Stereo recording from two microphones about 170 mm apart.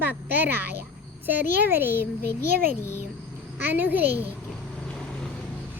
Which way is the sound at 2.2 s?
65° right (ahead or behind).